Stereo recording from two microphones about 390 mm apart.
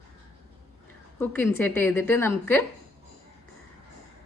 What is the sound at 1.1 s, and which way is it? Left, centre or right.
A woman's voice, centre.